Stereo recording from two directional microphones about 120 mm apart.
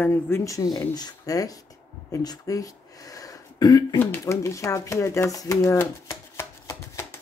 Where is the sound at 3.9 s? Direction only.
20° left (ahead or behind).